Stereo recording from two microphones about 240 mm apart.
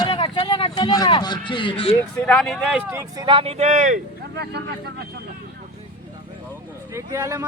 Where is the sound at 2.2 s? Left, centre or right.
Centre; by 4.9 s right.